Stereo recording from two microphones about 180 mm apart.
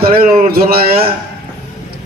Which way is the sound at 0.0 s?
55° right (ahead or behind).